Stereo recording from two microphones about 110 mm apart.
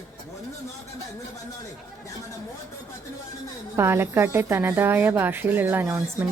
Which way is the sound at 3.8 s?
20° right (ahead or behind).